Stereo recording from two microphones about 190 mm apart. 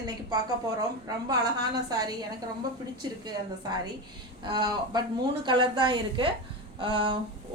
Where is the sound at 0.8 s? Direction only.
20° right (ahead or behind).